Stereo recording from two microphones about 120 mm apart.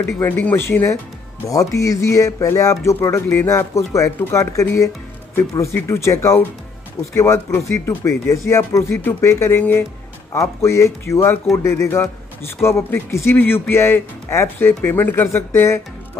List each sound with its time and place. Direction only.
0.2 s speech: 15° left (ahead or behind)